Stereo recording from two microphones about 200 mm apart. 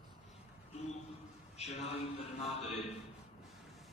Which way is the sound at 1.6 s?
30° left (ahead or behind).